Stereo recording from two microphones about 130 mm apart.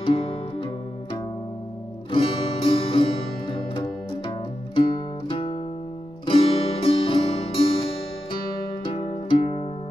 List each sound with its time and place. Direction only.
0.0 s music: 40° left (ahead or behind)
2.0 s music: 40° left (ahead or behind)
8.8 s music: 40° left (ahead or behind)